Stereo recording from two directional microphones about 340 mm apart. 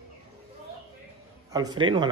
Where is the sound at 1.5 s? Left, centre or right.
Centre.